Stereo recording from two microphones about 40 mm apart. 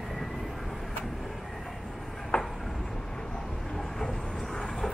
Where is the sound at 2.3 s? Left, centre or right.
Left.